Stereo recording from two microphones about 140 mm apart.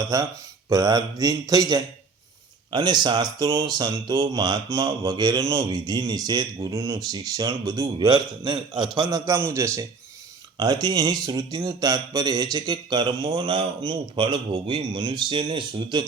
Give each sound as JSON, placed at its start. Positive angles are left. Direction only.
{"t": 0.1, "sound": "a man's voice", "side_deg": -25}